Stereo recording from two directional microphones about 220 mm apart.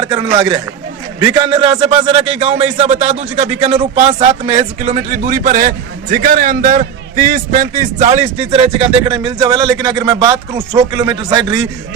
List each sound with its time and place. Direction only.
0.1 s a man's voice: 20° right (ahead or behind)